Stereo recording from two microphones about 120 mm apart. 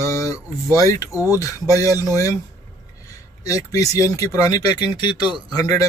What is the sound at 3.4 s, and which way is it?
Speech, 30° left (ahead or behind).